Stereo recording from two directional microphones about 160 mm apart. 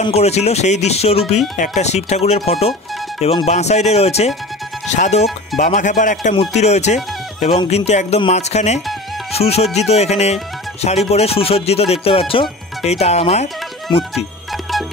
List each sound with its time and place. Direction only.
0.0 s speech: 40° left (ahead or behind)
1.8 s music: 45° left (ahead or behind)
9.3 s speech: 40° left (ahead or behind)